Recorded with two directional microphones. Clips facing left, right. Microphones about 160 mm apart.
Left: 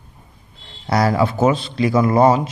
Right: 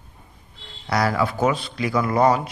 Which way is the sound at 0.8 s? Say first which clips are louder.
Left 4 dB; 25° left (ahead or behind).